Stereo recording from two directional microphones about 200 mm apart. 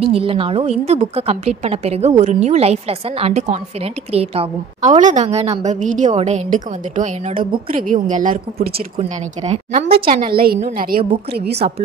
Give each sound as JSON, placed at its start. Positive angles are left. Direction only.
{"t": 0.0, "sound": "a woman's voice", "side_deg": -30}